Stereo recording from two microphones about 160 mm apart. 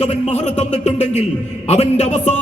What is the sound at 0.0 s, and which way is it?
A man's voice, 45° left (ahead or behind).